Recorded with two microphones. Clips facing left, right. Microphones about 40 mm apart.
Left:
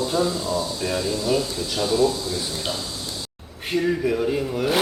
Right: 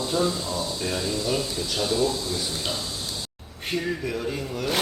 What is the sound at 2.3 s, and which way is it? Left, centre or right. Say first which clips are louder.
Speech: left 2 dB; centre.